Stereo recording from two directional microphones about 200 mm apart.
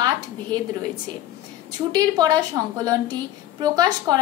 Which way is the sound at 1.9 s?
20° right (ahead or behind).